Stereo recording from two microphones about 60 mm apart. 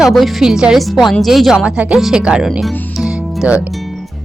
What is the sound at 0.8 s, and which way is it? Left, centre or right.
Speech, centre.